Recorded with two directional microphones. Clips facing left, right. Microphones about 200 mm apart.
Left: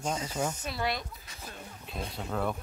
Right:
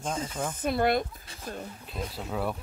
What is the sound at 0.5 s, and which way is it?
Speech, 55° right (ahead or behind).